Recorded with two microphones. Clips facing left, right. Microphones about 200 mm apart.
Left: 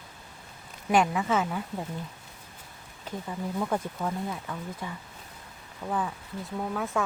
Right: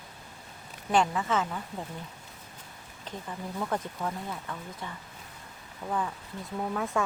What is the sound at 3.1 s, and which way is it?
Speech, 10° left (ahead or behind).